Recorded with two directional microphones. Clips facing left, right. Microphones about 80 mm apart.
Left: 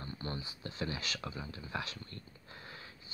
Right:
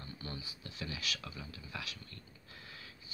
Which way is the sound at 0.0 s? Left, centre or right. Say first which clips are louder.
Left 4 dB; left.